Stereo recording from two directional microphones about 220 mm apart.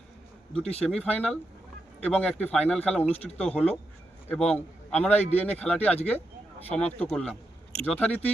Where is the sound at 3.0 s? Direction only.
30° left (ahead or behind).